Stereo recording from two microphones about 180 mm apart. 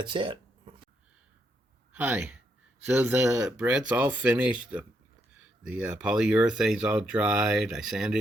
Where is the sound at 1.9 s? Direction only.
10° right (ahead or behind).